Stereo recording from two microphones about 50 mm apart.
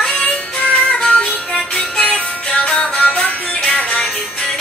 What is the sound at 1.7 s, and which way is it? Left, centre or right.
Music, centre.